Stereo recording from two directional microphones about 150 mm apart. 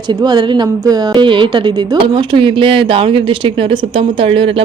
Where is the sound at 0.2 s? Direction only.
30° right (ahead or behind).